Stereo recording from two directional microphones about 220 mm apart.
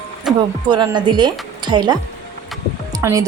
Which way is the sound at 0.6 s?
20° right (ahead or behind).